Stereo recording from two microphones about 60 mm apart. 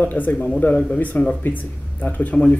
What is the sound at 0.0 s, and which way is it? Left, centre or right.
A man's voice, left.